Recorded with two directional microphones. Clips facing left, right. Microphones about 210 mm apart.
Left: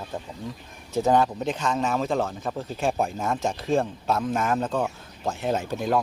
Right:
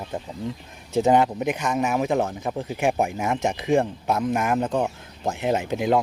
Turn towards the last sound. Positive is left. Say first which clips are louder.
# right 3 dB
turn(degrees=-15)  # may be behind; listen again after turning